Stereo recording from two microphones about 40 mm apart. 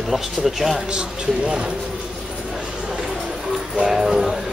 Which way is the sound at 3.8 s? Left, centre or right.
Centre.